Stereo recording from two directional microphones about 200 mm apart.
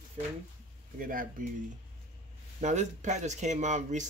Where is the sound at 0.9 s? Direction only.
45° right (ahead or behind).